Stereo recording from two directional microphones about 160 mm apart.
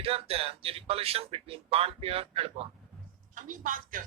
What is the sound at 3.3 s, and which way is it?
Speech, 55° right (ahead or behind).